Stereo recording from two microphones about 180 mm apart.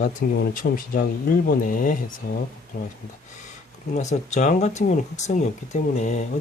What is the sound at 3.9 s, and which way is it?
Speech, 40° left (ahead or behind).